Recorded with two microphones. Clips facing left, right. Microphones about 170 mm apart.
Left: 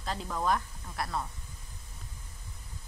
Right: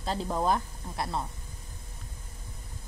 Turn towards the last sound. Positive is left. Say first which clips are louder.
# right 2 dB
turn(degrees=-25)  # may be behind; listen again after turning